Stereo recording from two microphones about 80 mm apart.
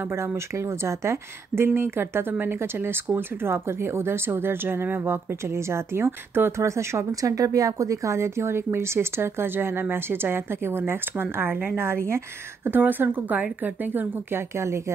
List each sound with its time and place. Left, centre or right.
0.0 s a woman's voice: right